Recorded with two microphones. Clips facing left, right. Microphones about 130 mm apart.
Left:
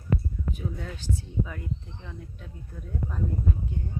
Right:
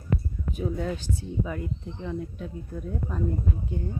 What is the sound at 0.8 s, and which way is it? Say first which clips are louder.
Speech: right 4 dB; 20° right (ahead or behind).